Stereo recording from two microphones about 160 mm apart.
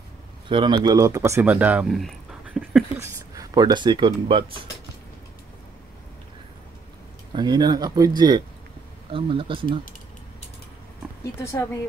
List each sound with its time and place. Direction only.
0.5 s speech: 30° right (ahead or behind); by 3.1 s 10° right (ahead or behind)
3.3 s speech: 25° right (ahead or behind)
7.3 s speech: 25° right (ahead or behind)